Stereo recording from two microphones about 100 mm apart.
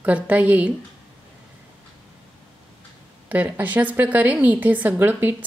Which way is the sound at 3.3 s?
15° right (ahead or behind).